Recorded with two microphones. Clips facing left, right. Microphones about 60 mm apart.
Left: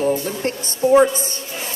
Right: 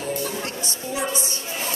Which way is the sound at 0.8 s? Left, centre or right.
Left.